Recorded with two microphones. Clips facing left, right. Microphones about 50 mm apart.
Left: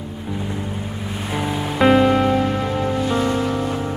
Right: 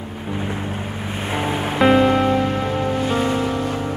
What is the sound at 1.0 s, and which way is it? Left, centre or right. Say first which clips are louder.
Waves: right 1 dB; right.